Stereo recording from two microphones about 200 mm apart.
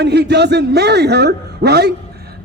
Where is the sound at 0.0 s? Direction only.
55° right (ahead or behind).